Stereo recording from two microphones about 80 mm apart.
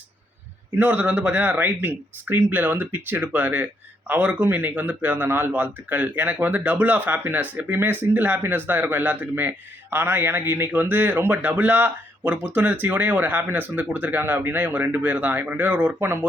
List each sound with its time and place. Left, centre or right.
0.8 s speech: centre